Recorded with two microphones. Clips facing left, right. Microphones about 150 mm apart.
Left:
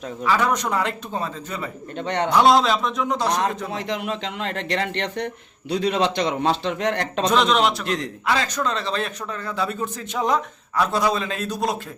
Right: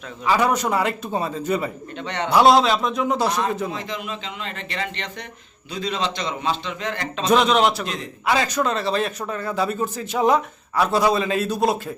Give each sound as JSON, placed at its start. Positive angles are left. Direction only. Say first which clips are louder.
{"t": 0.3, "sound": "a man's voice", "louder": "right 2 dB", "side_deg": -10}
{"t": 2.0, "sound": "a man's voice", "louder": "left 4 dB", "side_deg": 45}
{"t": 2.3, "sound": "a man's voice", "louder": "right 2 dB", "side_deg": -5}
{"t": 3.7, "sound": "a man's voice", "louder": "left 3 dB", "side_deg": 70}
{"t": 7.3, "sound": "a man's voice", "louder": "right 2 dB", "side_deg": -5}